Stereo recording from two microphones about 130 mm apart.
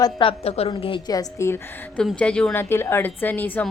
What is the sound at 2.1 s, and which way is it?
A woman's voice, 10° left (ahead or behind).